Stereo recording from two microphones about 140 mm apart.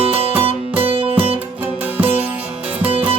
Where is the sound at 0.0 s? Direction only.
45° right (ahead or behind).